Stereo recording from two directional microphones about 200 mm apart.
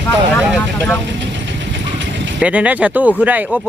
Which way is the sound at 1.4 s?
65° right (ahead or behind).